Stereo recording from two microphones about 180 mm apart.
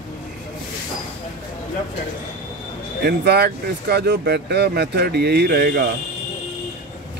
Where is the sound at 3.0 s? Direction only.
65° right (ahead or behind).